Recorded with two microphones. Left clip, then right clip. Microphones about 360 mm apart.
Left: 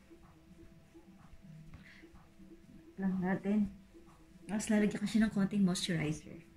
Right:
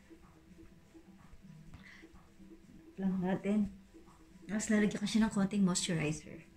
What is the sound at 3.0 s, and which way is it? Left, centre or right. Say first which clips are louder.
Speech: even; centre.